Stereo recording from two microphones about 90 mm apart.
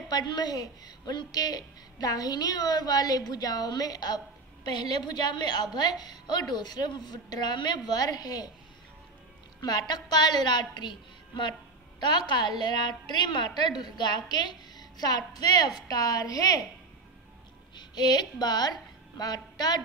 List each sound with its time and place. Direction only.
0.1 s a woman's voice: 50° left (ahead or behind)
9.6 s a woman's voice: 50° left (ahead or behind)
17.7 s music: 50° left (ahead or behind)
18.4 s a woman's voice: 50° left (ahead or behind)